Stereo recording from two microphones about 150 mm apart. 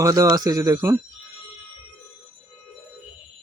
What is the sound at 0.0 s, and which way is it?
Speech, 20° right (ahead or behind).